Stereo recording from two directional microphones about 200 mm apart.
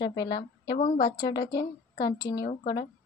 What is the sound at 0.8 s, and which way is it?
Speech, 40° left (ahead or behind).